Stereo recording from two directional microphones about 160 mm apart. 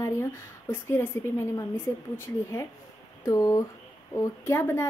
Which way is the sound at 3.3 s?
20° left (ahead or behind).